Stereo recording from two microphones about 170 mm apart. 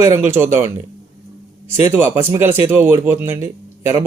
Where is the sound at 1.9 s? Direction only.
15° right (ahead or behind).